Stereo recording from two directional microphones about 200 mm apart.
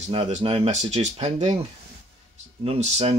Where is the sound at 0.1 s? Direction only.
30° right (ahead or behind).